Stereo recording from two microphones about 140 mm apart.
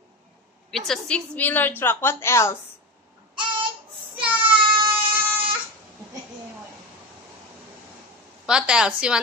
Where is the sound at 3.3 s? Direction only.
35° right (ahead or behind).